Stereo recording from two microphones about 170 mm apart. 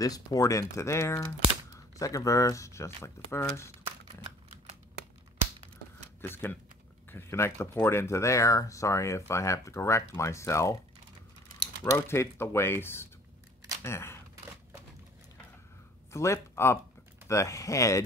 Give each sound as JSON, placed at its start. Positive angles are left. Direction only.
{"t": 0.0, "sound": "speech", "side_deg": 20}
{"t": 6.2, "sound": "speech", "side_deg": 10}
{"t": 11.8, "sound": "speech", "side_deg": 15}
{"t": 16.1, "sound": "speech", "side_deg": 15}